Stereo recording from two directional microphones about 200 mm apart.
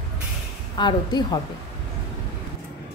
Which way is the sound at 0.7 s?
20° left (ahead or behind).